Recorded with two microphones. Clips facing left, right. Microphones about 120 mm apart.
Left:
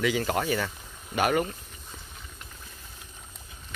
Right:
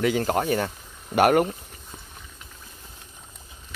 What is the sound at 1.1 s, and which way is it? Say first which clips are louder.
Speech: right 7 dB; 60° right (ahead or behind).